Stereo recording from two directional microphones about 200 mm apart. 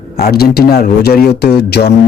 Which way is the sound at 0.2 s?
50° left (ahead or behind).